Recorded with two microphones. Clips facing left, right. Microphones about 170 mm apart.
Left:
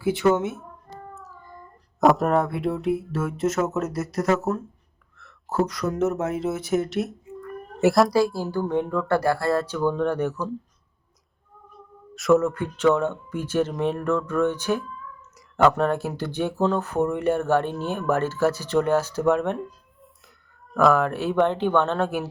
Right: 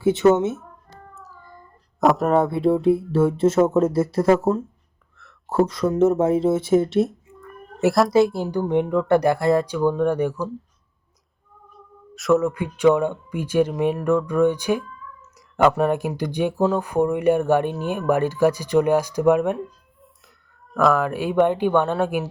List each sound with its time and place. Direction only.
0.0 s speech: 25° right (ahead or behind)
1.1 s child singing: centre (ahead or behind)
2.0 s speech: centre (ahead or behind)
2.4 s speech: 30° right (ahead or behind)
7.8 s speech: centre (ahead or behind)
8.1 s speech: 20° right (ahead or behind)
12.1 s speech: centre (ahead or behind)
12.5 s speech: 10° right (ahead or behind)
20.7 s speech: centre (ahead or behind)
21.1 s speech: 10° right (ahead or behind)